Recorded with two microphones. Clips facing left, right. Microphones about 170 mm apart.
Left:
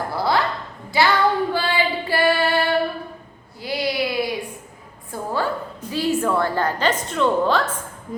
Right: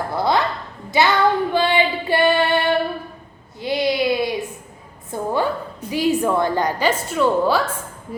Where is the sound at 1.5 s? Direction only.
20° right (ahead or behind).